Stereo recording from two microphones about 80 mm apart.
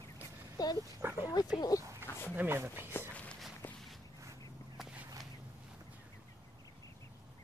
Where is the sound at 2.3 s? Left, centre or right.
Right.